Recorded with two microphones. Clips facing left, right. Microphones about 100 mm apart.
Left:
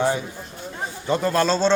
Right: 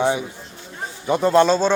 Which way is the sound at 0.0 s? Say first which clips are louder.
Right 2 dB; 20° right (ahead or behind).